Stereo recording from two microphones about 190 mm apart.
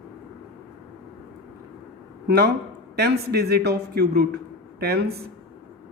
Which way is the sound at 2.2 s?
55° right (ahead or behind).